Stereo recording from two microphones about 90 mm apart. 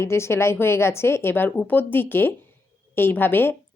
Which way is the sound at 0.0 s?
30° left (ahead or behind).